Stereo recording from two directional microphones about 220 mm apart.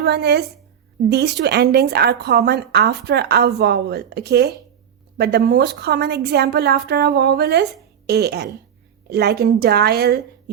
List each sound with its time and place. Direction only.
0.0 s a woman's voice: 50° right (ahead or behind)